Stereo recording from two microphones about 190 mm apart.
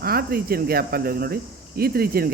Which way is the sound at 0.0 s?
55° right (ahead or behind).